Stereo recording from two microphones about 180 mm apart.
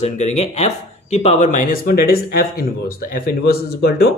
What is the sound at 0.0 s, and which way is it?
Speech, 35° left (ahead or behind).